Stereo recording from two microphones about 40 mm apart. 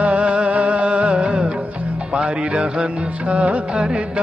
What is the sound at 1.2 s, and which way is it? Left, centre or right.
Music of bollywood, right.